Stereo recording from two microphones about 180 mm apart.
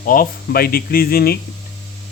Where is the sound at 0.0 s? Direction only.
50° left (ahead or behind).